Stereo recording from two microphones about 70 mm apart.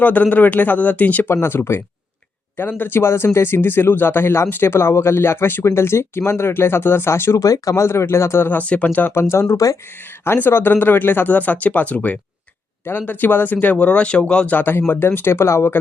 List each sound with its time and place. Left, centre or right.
0.0 s speech: left
1.3 s speech: left
7.4 s speech: left
7.9 s speech: left
8.4 s speech: left
9.3 s speech: left